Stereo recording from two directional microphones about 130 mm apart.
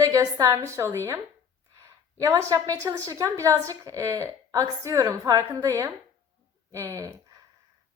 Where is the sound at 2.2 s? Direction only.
25° right (ahead or behind).